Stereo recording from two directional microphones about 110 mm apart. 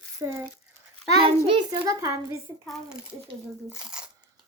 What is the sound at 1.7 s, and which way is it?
Speech, 30° right (ahead or behind).